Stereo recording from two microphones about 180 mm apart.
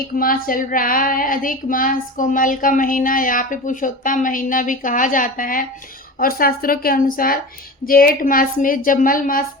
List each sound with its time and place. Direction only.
0.2 s child singing: 50° left (ahead or behind)